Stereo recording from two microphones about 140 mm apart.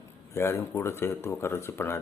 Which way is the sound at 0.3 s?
15° left (ahead or behind).